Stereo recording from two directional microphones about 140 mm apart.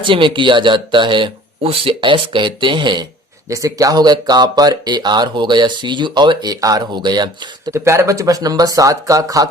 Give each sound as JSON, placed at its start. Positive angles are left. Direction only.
{"t": 0.0, "sound": "speech", "side_deg": -35}
{"t": 3.5, "sound": "speech", "side_deg": -25}
{"t": 7.7, "sound": "speech", "side_deg": -20}